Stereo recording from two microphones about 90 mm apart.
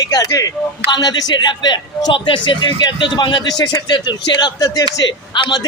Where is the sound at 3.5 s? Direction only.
50° left (ahead or behind).